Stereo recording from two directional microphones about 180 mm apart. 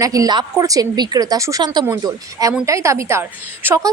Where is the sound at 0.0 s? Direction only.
20° right (ahead or behind).